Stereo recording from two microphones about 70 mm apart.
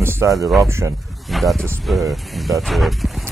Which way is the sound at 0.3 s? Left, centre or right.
Centre.